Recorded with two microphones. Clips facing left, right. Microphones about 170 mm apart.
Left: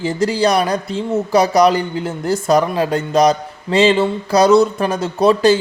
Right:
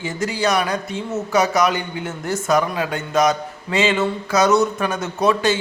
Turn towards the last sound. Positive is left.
turn(degrees=30)  # may be behind; listen again after turning